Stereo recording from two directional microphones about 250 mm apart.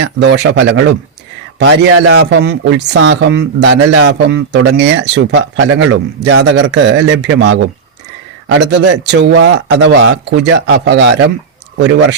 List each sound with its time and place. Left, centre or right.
0.2 s speech: right